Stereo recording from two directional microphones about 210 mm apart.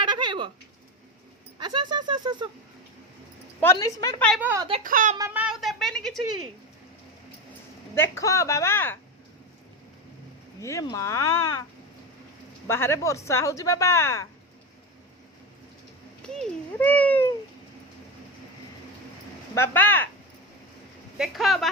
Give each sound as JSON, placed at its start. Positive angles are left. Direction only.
{"t": 0.0, "sound": "a sound", "side_deg": -20}
{"t": 1.5, "sound": "a sound", "side_deg": -20}
{"t": 3.6, "sound": "speech", "side_deg": 15}
{"t": 4.4, "sound": "a woman's voice", "side_deg": -10}
{"t": 4.8, "sound": "speech", "side_deg": -40}
{"t": 5.1, "sound": "a sound", "side_deg": -10}
{"t": 7.9, "sound": "speech", "side_deg": 15}
{"t": 10.6, "sound": "speech", "side_deg": 15}
{"t": 12.6, "sound": "speech", "side_deg": 10}
{"t": 16.2, "sound": "speech", "side_deg": 5}
{"t": 19.5, "sound": "speech", "side_deg": 10}
{"t": 21.2, "sound": "speech", "side_deg": 0}